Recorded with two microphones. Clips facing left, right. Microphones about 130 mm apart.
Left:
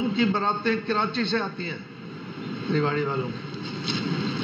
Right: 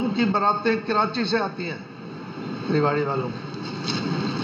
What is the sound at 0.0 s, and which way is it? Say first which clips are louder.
A man's voice: right 2 dB; 35° right (ahead or behind).